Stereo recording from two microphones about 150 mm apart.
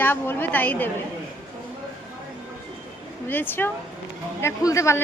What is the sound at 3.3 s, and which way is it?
A woman's voice, 15° left (ahead or behind).